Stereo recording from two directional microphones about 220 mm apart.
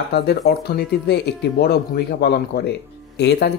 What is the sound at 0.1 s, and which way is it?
Speech, 45° left (ahead or behind).